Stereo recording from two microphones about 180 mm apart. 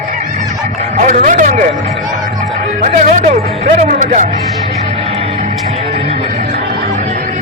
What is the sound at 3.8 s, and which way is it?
Music, 45° right (ahead or behind).